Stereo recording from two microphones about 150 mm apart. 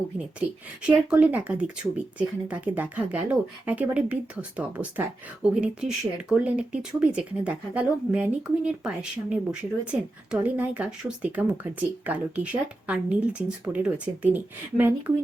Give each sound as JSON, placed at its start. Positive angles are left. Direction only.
{"t": 0.9, "sound": "speech", "side_deg": -10}